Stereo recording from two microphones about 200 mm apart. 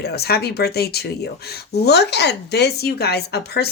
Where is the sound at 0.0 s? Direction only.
55° left (ahead or behind).